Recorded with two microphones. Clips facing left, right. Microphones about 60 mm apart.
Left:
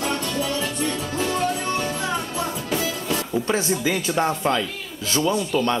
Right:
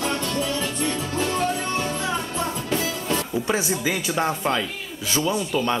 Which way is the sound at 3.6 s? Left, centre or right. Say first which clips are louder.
Left 2 dB; centre.